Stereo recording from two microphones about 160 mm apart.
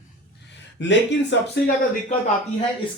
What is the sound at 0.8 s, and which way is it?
Speech, 90° left.